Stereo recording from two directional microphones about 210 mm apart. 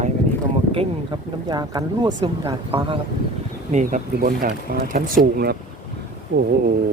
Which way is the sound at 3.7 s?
35° right (ahead or behind).